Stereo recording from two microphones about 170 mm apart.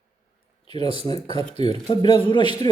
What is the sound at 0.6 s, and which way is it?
A man's voice, 30° left (ahead or behind).